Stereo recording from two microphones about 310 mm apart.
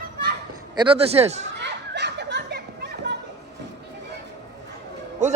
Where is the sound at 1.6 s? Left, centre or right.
Right.